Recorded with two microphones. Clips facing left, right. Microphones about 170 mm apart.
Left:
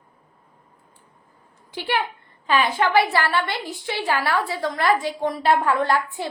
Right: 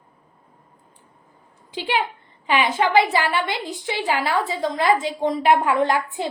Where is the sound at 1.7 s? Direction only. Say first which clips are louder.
Right 1 dB; 20° right (ahead or behind).